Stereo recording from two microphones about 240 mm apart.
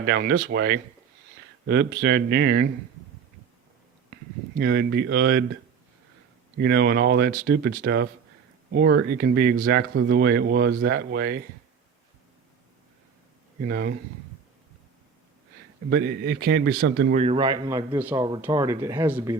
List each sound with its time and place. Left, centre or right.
0.0 s speech: right
4.1 s speech: right
6.6 s speech: right
13.6 s speech: right
15.9 s speech: right
17.1 s a man's voice: right; by 19.4 s centre